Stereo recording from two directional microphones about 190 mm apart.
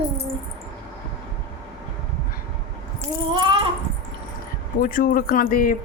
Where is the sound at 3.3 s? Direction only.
25° right (ahead or behind).